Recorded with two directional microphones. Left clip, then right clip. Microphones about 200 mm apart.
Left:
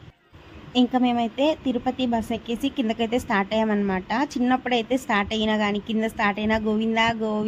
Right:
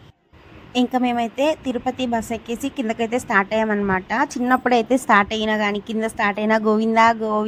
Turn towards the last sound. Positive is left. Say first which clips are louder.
# right 7 dB
turn(degrees=-10)  # may be behind; listen again after turning